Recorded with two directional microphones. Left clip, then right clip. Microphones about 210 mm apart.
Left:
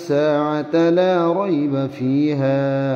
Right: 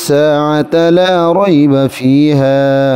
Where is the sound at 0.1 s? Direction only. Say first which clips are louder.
Right 8 dB; 55° right (ahead or behind).